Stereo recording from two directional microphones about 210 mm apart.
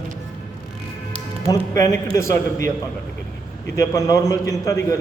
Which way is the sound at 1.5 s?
15° left (ahead or behind).